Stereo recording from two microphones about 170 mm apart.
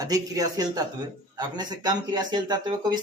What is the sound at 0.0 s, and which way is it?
A man's voice, 20° right (ahead or behind).